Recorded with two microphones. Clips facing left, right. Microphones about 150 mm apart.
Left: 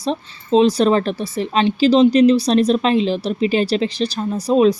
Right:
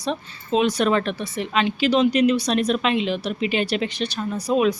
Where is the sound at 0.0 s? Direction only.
30° left (ahead or behind).